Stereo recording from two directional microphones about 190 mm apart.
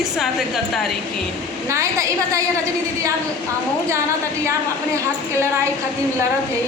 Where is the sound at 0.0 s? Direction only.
Centre (ahead or behind).